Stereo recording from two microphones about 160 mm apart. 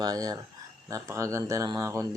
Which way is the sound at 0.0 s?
20° right (ahead or behind).